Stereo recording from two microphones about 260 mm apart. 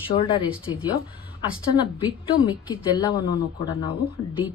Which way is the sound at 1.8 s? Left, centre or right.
Centre.